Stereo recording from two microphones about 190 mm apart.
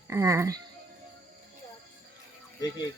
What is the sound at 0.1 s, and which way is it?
Speech, 15° right (ahead or behind).